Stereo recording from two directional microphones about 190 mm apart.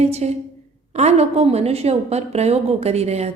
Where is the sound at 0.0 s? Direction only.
35° right (ahead or behind).